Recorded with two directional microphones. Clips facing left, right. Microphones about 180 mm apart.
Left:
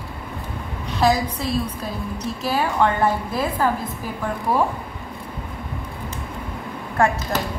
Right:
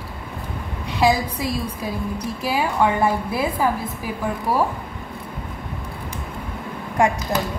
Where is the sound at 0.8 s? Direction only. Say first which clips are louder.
Even; 15° right (ahead or behind).